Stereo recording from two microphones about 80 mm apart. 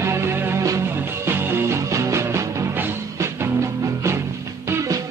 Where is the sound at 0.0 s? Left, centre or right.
Right.